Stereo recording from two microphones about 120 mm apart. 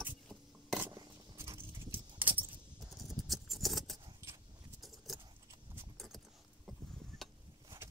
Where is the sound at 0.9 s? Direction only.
30° right (ahead or behind).